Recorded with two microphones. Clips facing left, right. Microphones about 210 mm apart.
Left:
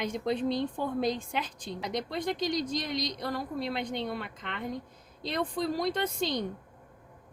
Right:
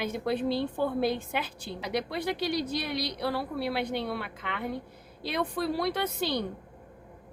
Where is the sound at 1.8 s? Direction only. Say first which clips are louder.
Right 2 dB; 60° right (ahead or behind).